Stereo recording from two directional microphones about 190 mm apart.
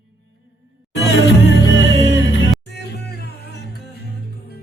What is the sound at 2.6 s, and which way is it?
Music, 60° left (ahead or behind).